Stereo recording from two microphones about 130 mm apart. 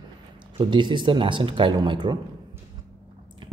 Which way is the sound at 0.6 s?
35° right (ahead or behind).